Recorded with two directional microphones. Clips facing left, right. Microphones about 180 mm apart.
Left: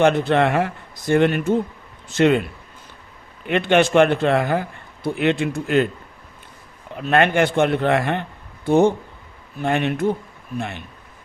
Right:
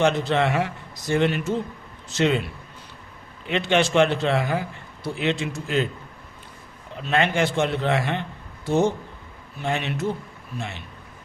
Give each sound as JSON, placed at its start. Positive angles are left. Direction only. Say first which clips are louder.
{"t": 0.0, "sound": "speech", "louder": "left 4 dB", "side_deg": 55}
{"t": 3.4, "sound": "speech", "louder": "left 4 dB", "side_deg": 55}
{"t": 7.0, "sound": "speech", "louder": "left 5 dB", "side_deg": 55}